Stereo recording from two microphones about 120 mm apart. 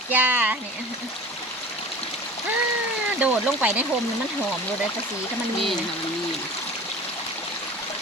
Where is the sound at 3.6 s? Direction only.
15° right (ahead or behind).